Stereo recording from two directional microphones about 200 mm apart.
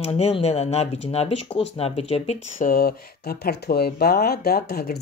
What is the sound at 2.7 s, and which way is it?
Speech, 50° left (ahead or behind).